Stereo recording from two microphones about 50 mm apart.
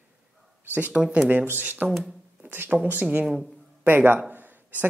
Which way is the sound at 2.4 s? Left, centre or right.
Right.